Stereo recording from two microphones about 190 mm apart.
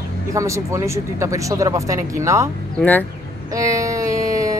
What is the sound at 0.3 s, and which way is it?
Speech, 15° right (ahead or behind).